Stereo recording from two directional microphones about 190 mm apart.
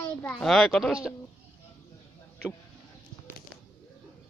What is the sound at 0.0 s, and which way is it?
A child's voice, 5° left (ahead or behind).